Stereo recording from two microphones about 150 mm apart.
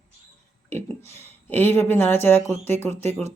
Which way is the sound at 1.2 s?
15° left (ahead or behind).